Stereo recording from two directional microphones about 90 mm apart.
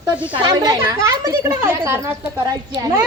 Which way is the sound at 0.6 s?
40° right (ahead or behind).